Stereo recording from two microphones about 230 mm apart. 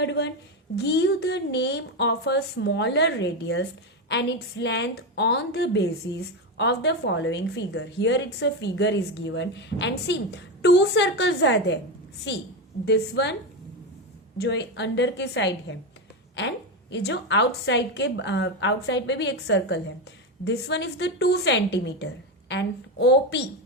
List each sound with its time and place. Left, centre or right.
0.0 s a woman's voice: left
14.3 s a woman's voice: left